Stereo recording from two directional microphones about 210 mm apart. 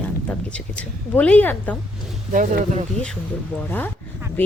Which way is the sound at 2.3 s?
35° right (ahead or behind).